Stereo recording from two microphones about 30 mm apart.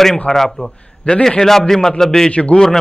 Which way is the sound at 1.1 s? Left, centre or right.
Left.